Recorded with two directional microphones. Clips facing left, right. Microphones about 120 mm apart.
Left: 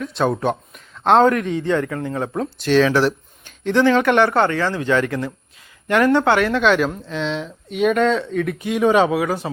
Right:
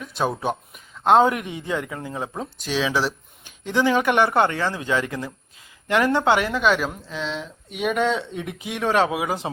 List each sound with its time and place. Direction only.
0.0 s speech: 5° right (ahead or behind)
3.7 s speech: 15° right (ahead or behind)
8.0 s speech: 20° right (ahead or behind)
8.7 s speech: centre (ahead or behind)
9.1 s speech: 15° right (ahead or behind)